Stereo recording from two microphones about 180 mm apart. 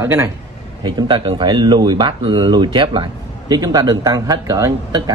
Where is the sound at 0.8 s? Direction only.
25° right (ahead or behind).